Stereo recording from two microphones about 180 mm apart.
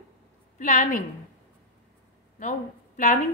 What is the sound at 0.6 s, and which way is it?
Speech, 45° left (ahead or behind).